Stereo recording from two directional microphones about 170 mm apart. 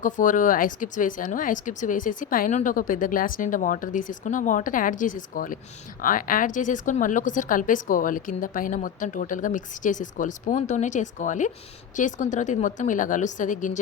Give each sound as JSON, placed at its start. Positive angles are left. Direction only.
{"t": 0.0, "sound": "a woman's voice", "side_deg": 50}